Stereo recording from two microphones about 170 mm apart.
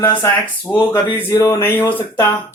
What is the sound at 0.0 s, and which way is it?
A man's voice, 10° left (ahead or behind).